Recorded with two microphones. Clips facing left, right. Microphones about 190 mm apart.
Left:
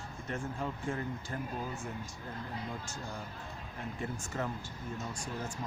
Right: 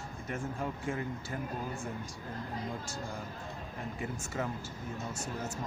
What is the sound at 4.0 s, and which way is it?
Speech, 10° right (ahead or behind).